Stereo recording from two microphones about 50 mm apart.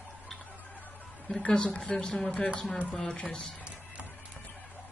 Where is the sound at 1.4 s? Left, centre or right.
Left.